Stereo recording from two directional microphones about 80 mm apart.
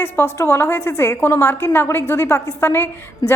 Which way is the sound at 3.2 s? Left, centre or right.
Left.